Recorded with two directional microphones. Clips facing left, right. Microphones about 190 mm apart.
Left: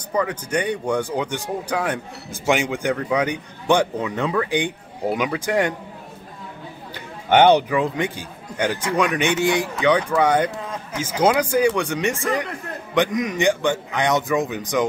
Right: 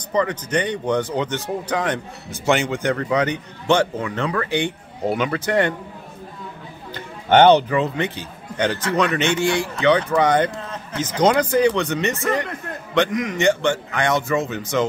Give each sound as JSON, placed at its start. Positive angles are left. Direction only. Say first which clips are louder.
{"t": 0.1, "sound": "a man's voice", "louder": "right 2 dB", "side_deg": 10}
{"t": 7.2, "sound": "a man's voice", "louder": "right 2 dB", "side_deg": 10}